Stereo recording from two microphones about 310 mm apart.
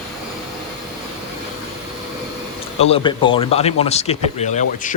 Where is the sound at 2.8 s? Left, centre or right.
Centre.